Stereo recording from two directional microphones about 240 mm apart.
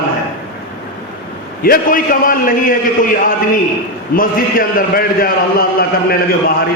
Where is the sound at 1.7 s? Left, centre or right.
Left.